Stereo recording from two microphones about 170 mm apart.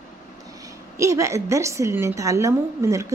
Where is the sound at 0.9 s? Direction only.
20° right (ahead or behind).